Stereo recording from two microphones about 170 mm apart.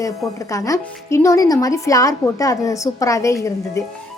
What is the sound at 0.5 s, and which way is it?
A woman's voice, 20° left (ahead or behind).